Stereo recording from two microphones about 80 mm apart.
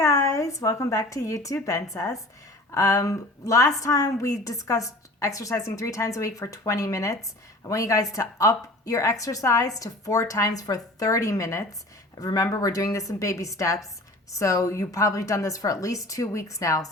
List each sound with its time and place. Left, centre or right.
0.0 s a woman's voice: left